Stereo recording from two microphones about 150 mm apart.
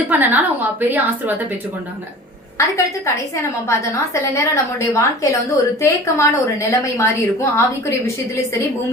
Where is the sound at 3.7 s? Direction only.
20° left (ahead or behind).